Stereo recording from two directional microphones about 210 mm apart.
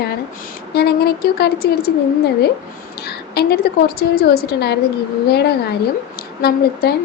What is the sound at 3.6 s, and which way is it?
A woman's voice, 45° left (ahead or behind).